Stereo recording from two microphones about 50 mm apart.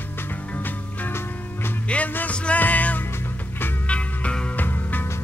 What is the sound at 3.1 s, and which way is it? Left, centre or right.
Music, left.